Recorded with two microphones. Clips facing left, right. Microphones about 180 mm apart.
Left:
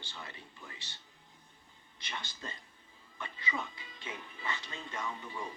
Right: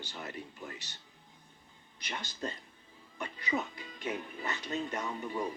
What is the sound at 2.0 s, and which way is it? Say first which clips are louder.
Speech: right 5 dB; 40° right (ahead or behind).